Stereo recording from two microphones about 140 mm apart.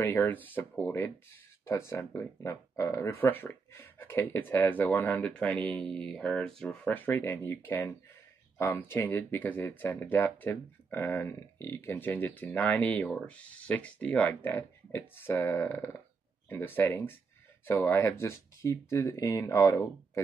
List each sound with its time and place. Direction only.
0.0 s speech: 15° left (ahead or behind)